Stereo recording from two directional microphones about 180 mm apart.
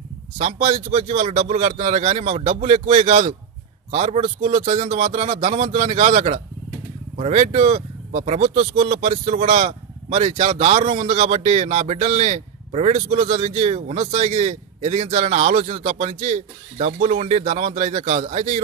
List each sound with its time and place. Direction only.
0.4 s speech: 40° right (ahead or behind)